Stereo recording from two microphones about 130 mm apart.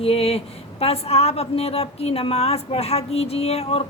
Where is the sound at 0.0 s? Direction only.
50° left (ahead or behind).